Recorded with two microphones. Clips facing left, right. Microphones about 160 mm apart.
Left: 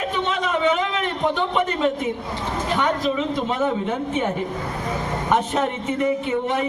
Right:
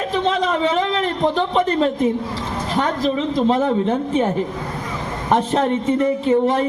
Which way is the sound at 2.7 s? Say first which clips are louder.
Right 3 dB; 35° right (ahead or behind).